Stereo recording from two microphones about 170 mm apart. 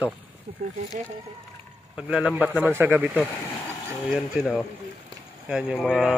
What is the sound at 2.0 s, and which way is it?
Speech, 5° right (ahead or behind).